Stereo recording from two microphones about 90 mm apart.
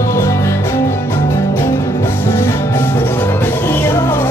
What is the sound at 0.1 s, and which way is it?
Music, 35° left (ahead or behind).